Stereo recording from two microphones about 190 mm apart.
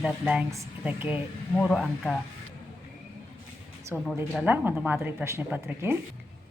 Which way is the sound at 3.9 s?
Centre (ahead or behind).